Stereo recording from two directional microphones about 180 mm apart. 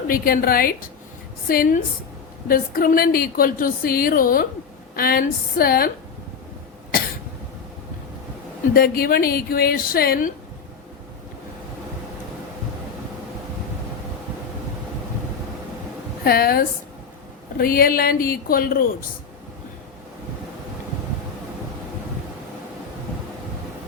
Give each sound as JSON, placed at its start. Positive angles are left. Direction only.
{"t": 0.1, "sound": "a woman's voice", "side_deg": 55}
{"t": 8.7, "sound": "a woman's voice", "side_deg": 55}
{"t": 16.2, "sound": "a woman's voice", "side_deg": 55}